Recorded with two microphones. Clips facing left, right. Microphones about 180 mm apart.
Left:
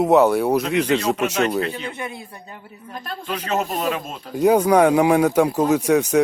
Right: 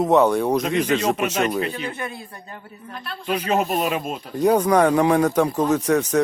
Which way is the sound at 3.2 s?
15° right (ahead or behind).